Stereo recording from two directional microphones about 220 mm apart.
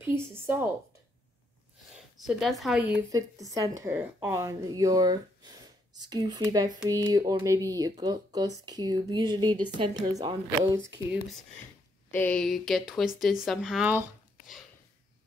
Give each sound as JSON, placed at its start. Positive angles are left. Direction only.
{"t": 0.0, "sound": "a woman's voice", "side_deg": -10}
{"t": 2.2, "sound": "a woman's voice", "side_deg": 0}
{"t": 12.2, "sound": "speech", "side_deg": 5}